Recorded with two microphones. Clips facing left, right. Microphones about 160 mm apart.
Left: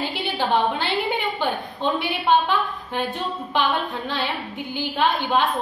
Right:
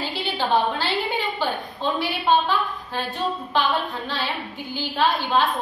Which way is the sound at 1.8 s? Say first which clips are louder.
Even; 20° left (ahead or behind).